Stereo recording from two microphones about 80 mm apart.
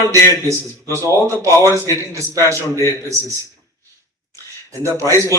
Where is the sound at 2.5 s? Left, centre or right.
Left.